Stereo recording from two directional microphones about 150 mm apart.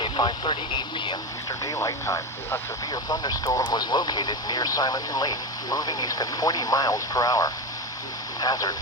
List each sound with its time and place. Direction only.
0.0 s speech: 35° left (ahead or behind)